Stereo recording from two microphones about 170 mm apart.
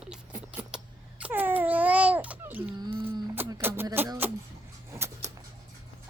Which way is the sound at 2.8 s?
30° right (ahead or behind).